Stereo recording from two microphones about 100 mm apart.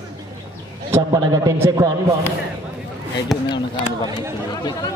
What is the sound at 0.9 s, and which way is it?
Speech, 30° right (ahead or behind).